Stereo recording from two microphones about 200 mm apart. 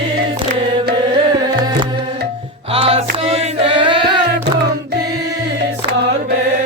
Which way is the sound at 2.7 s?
30° right (ahead or behind).